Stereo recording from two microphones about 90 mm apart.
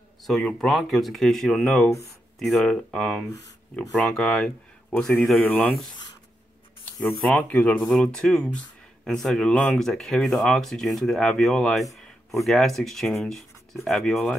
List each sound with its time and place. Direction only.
0.3 s speech: 5° left (ahead or behind)
5.4 s speech: 20° left (ahead or behind)
7.2 s speech: 15° left (ahead or behind)